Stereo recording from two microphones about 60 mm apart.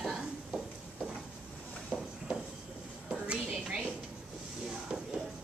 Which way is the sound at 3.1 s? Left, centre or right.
Centre.